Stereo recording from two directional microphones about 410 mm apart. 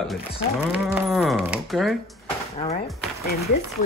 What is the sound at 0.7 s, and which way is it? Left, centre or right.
Speech, centre.